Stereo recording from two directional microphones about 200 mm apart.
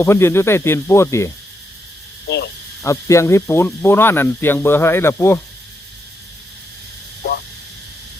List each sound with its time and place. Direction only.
0.0 s speech: 15° left (ahead or behind)
2.2 s speech: 60° left (ahead or behind)
2.8 s speech: 15° left (ahead or behind)